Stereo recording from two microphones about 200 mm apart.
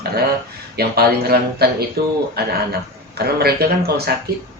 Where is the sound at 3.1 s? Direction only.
50° right (ahead or behind).